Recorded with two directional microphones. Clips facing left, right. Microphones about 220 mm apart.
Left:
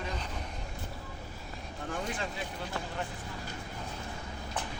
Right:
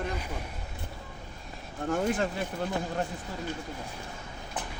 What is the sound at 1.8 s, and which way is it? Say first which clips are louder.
Speech: right 9 dB; 50° right (ahead or behind).